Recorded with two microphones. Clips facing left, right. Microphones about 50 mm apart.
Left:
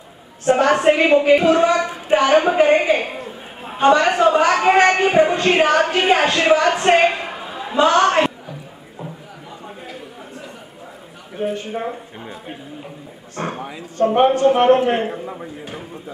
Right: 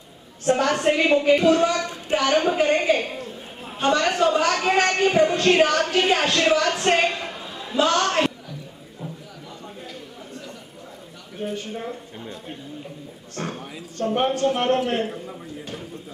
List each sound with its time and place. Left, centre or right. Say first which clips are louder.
0.6 s speech: left 7 dB; left
11.4 s speech: left 6 dB; centre
11.8 s speech: left 5 dB; left
13.4 s speech: left 5 dB; centre